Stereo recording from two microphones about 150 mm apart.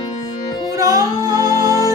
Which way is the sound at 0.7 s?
25° right (ahead or behind).